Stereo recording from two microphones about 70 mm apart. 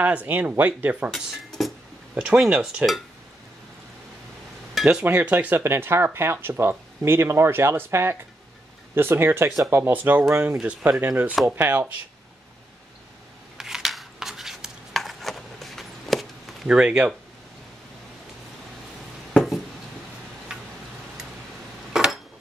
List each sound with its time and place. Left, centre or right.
0.0 s speech: right
1.1 s speech: centre
2.1 s speech: centre
5.0 s speech: right
5.6 s speech: right
13.6 s a sound: centre
16.6 s speech: centre
19.3 s a sound: centre
21.9 s dishes: centre